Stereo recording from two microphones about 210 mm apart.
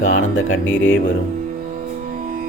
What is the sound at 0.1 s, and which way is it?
Speech, 65° left (ahead or behind).